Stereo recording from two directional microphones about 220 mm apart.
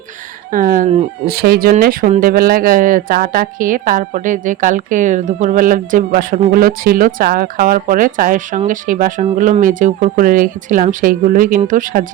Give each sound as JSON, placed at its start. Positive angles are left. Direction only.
{"t": 0.5, "sound": "speech", "side_deg": -40}
{"t": 1.3, "sound": "speech", "side_deg": -45}